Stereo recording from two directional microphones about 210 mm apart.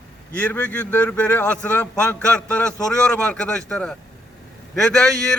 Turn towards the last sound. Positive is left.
turn(degrees=5)  # may be behind; listen again after turning